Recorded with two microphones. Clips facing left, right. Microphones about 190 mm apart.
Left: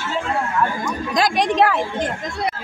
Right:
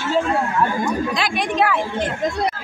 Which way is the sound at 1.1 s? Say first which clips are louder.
Left 3 dB; 40° left (ahead or behind).